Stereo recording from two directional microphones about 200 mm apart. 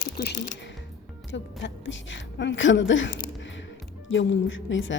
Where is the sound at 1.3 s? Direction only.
65° left (ahead or behind).